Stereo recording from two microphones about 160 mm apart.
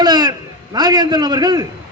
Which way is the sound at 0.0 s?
25° right (ahead or behind).